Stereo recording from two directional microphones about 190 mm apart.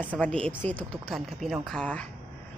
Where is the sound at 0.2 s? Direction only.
5° left (ahead or behind).